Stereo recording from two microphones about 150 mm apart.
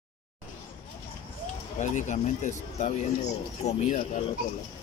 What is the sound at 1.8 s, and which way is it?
Speech, 50° left (ahead or behind).